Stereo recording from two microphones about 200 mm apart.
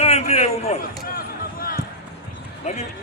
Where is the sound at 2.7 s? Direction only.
35° left (ahead or behind).